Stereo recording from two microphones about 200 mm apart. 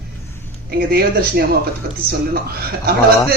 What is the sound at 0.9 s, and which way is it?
Speech, 50° right (ahead or behind).